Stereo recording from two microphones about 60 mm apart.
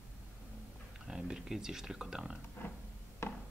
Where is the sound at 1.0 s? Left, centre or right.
Centre.